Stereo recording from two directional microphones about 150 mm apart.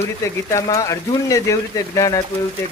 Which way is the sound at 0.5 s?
20° left (ahead or behind).